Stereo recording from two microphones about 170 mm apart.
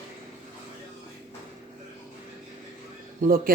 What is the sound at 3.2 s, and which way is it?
Speech, 60° right (ahead or behind).